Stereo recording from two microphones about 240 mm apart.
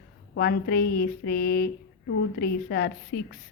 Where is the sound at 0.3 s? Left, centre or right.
Left.